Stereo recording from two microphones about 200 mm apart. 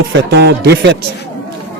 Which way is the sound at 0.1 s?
60° right (ahead or behind).